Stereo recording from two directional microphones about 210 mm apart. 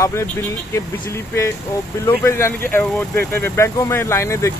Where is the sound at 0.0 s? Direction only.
15° left (ahead or behind).